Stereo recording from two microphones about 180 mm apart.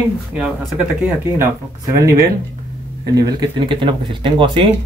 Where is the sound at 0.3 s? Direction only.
5° right (ahead or behind).